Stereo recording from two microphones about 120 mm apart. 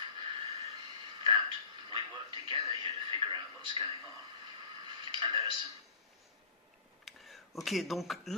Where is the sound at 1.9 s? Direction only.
40° right (ahead or behind).